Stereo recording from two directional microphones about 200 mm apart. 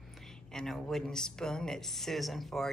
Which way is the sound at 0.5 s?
Centre (ahead or behind).